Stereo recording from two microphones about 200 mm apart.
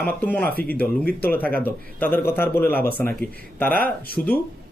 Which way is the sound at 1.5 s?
10° left (ahead or behind).